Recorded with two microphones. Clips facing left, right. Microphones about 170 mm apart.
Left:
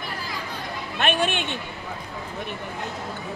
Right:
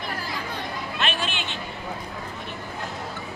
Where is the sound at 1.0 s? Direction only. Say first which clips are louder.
Left 6 dB; 55° left (ahead or behind).